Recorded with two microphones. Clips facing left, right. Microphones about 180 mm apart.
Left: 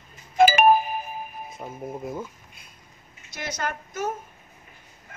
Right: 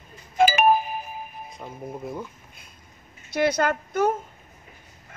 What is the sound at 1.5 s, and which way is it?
Speech, 5° left (ahead or behind).